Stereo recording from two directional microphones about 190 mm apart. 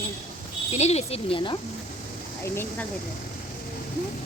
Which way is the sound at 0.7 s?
35° left (ahead or behind).